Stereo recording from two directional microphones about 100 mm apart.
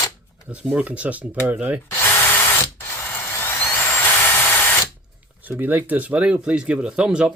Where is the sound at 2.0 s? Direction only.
20° left (ahead or behind).